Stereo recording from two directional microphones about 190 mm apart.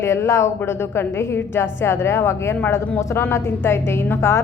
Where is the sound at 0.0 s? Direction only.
15° left (ahead or behind).